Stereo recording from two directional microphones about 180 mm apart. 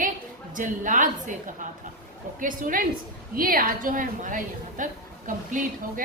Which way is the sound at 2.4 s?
50° right (ahead or behind).